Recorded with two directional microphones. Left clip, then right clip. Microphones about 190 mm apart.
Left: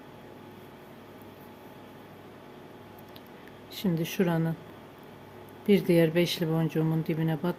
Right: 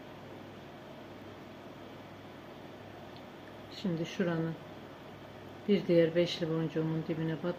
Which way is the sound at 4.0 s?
65° left (ahead or behind).